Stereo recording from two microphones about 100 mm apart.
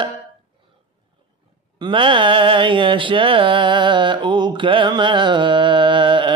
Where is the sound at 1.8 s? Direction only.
55° right (ahead or behind).